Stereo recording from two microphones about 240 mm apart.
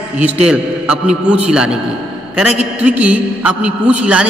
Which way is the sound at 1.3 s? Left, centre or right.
Centre.